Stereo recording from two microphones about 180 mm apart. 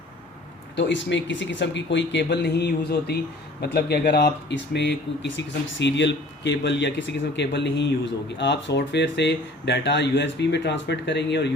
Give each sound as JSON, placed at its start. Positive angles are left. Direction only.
{"t": 0.8, "sound": "speech", "side_deg": 80}